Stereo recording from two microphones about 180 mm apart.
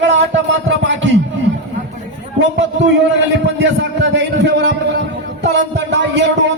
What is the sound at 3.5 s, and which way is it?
A man's voice, 80° right.